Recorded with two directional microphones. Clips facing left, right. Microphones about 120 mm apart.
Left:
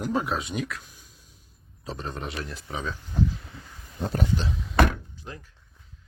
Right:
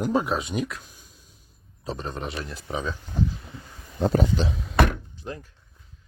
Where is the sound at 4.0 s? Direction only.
90° right.